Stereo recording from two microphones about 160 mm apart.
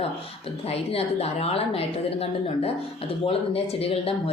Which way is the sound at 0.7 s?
40° left (ahead or behind).